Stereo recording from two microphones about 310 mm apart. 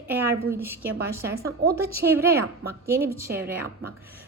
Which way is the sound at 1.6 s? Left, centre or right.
Right.